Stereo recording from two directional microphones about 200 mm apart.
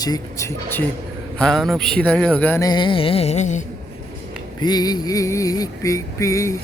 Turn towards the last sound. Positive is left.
turn(degrees=15)  # may be behind; listen again after turning